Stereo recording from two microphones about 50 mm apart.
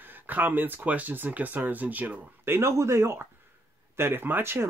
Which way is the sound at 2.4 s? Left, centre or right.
Right.